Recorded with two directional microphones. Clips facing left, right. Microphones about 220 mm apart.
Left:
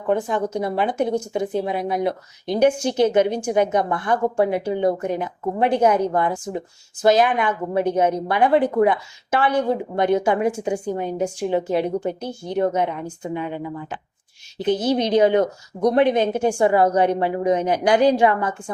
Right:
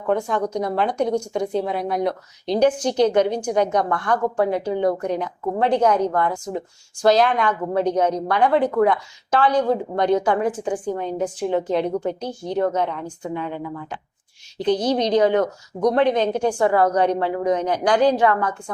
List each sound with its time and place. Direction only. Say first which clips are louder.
0.1 s a woman's voice: even; 5° left (ahead or behind)
3.8 s a woman's voice: even; 20° left (ahead or behind)
4.1 s a woman's voice: left 1 dB; 10° left (ahead or behind)